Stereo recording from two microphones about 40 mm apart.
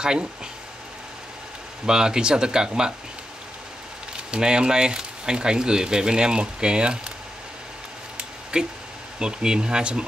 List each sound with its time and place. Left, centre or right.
1.9 s speech: centre
4.3 s speech: right
8.5 s speech: right